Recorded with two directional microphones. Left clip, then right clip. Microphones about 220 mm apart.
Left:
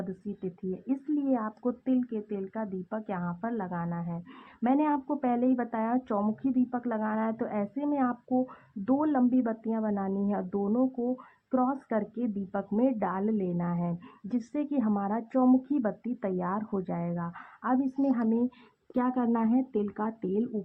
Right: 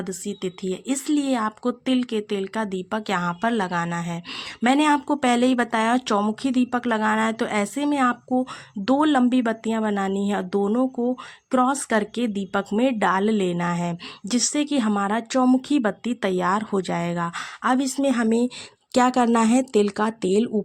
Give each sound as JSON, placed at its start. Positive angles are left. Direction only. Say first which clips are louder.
{"t": 0.4, "sound": "speech", "louder": "right 7 dB", "side_deg": -25}